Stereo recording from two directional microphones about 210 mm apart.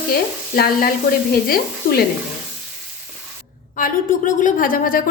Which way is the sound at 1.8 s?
45° left (ahead or behind).